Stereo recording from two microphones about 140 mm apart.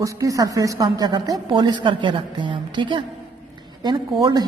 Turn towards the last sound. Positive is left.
turn(degrees=-30)  # may be behind; listen again after turning